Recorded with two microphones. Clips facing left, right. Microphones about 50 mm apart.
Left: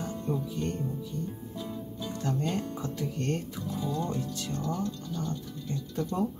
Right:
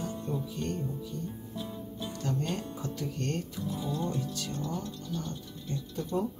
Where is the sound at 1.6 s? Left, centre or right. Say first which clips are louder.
Left 1 dB; right.